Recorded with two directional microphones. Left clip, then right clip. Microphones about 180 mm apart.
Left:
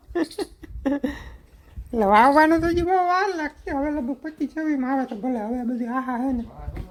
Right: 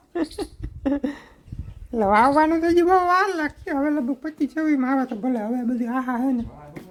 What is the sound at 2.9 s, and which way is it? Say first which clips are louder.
Speech: right 2 dB; 20° right (ahead or behind).